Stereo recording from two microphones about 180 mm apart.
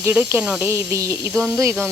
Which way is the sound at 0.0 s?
10° right (ahead or behind).